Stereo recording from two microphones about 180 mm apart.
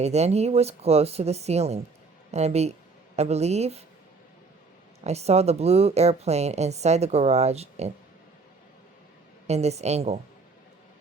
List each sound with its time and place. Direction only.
0.0 s a woman's voice: 35° right (ahead or behind)
5.0 s a woman's voice: 35° right (ahead or behind)
9.5 s a woman's voice: 35° right (ahead or behind)